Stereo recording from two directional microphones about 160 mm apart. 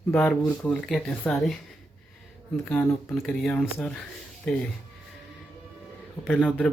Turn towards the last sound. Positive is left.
turn(degrees=5)  # may be behind; listen again after turning